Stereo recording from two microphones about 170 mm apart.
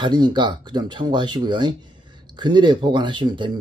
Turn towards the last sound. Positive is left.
turn(degrees=-30)  # may be behind; listen again after turning